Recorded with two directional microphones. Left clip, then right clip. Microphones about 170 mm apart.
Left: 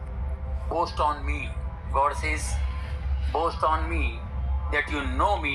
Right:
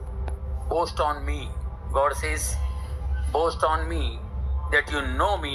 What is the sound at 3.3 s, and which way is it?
Speech, 15° right (ahead or behind).